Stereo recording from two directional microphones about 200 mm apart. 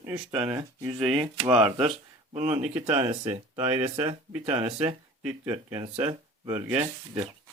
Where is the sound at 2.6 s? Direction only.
10° right (ahead or behind).